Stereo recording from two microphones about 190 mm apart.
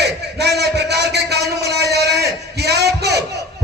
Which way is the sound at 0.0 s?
60° right (ahead or behind).